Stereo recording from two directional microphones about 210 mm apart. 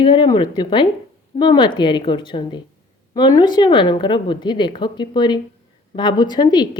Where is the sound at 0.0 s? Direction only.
20° left (ahead or behind).